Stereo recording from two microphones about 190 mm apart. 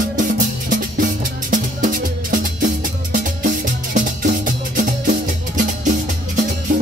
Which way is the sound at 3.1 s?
45° right (ahead or behind).